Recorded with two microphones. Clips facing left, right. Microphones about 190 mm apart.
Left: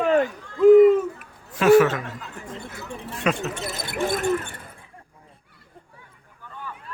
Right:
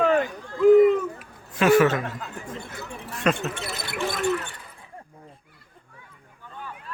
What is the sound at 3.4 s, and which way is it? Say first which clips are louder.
Speech: left 2 dB; 45° left (ahead or behind).